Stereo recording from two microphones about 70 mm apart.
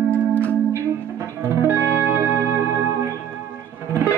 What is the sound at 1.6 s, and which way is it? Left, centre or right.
Music, right.